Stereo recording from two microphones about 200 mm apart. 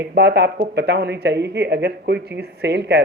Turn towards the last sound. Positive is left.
turn(degrees=-60)  # may be behind; listen again after turning